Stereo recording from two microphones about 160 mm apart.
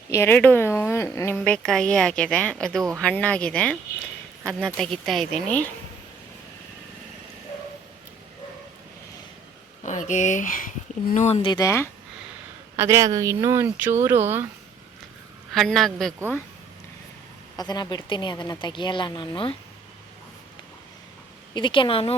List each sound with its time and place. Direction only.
0.1 s a woman's voice: 15° left (ahead or behind)
1.4 s a woman's voice: 5° left (ahead or behind)
9.8 s speech: 50° left (ahead or behind)
11.4 s speech: 25° left (ahead or behind)
12.7 s speech: 15° right (ahead or behind)
15.5 s a woman's voice: centre (ahead or behind)
17.6 s speech: 25° left (ahead or behind)
21.5 s speech: 30° left (ahead or behind)